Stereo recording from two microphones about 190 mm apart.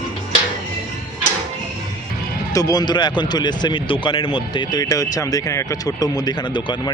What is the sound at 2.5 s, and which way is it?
Speech, 20° left (ahead or behind).